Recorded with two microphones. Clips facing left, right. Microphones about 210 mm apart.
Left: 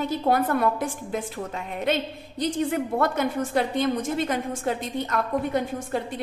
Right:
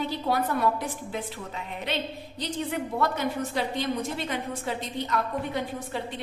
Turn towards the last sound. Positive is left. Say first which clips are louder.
# left 5 dB
turn(degrees=50)  # may be behind; listen again after turning